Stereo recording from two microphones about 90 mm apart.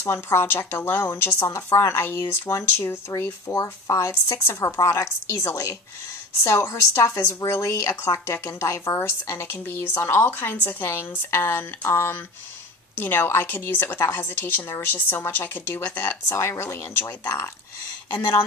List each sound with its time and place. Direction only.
0.0 s a woman's voice: 30° left (ahead or behind)